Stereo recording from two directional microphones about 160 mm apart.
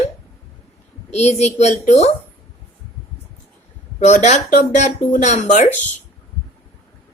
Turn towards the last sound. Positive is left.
turn(degrees=45)  # may be behind; listen again after turning